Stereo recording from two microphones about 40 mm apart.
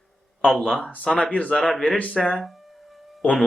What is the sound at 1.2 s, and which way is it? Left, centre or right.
Speech, left.